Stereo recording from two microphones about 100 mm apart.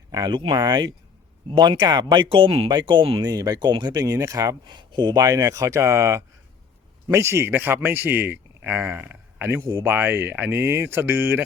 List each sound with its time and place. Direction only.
0.1 s speech: 40° right (ahead or behind); by 2.6 s 65° right (ahead or behind)
2.6 s speech: 50° right (ahead or behind)
4.6 s speech: 50° right (ahead or behind); by 11.4 s 20° right (ahead or behind)